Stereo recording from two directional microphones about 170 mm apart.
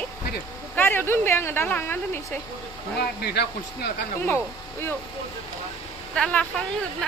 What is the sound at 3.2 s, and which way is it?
Speech, 70° left (ahead or behind).